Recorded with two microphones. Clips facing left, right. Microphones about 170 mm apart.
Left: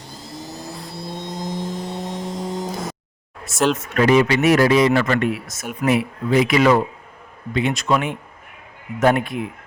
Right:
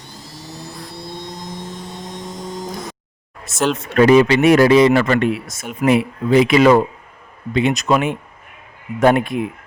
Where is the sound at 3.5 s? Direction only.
Centre (ahead or behind).